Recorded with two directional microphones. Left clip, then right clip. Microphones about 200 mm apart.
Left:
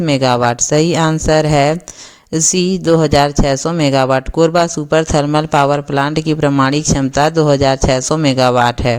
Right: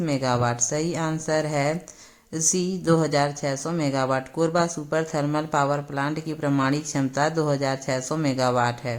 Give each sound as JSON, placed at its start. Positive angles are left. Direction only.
{"t": 0.0, "sound": "speech", "side_deg": 40}